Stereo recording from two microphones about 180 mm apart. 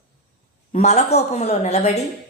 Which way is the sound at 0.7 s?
40° left (ahead or behind).